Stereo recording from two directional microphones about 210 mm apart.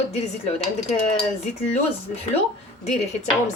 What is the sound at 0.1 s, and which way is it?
Speech, 30° left (ahead or behind).